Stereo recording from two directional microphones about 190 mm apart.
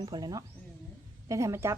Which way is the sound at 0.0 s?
20° right (ahead or behind).